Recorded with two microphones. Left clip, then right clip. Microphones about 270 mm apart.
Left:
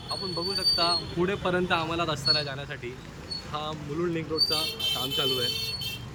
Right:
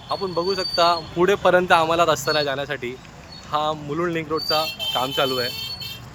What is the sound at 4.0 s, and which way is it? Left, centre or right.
Speech, centre.